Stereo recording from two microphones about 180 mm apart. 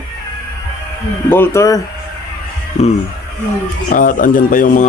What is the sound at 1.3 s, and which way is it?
Speech, 15° left (ahead or behind).